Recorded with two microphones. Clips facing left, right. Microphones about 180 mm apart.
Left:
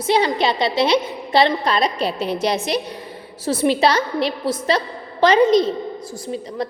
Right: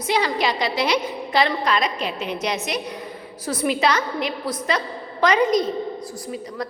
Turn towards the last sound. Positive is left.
turn(degrees=25)  # may be behind; listen again after turning